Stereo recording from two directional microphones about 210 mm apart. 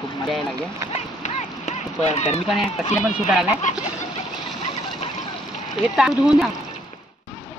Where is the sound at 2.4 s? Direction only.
Centre (ahead or behind).